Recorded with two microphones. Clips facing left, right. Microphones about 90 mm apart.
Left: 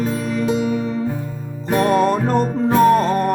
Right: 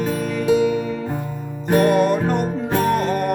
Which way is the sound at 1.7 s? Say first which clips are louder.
Even; 30° left (ahead or behind).